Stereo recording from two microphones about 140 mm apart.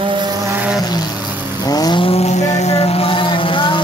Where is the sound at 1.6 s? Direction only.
30° left (ahead or behind).